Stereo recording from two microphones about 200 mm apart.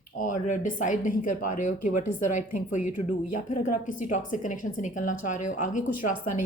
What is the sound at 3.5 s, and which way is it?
Speech, 40° left (ahead or behind).